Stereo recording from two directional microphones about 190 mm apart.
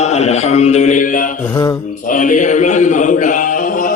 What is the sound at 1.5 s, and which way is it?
Mantra, 20° left (ahead or behind).